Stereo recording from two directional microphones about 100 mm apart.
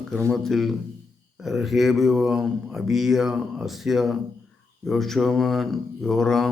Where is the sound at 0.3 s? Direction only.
5° left (ahead or behind).